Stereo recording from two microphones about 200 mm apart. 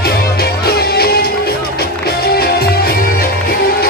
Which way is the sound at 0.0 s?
50° left (ahead or behind).